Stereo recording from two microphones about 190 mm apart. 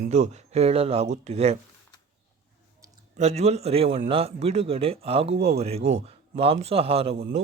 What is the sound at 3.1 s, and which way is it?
Speech, 35° right (ahead or behind).